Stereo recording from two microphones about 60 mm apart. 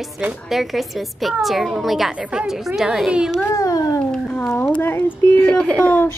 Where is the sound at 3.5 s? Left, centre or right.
Left.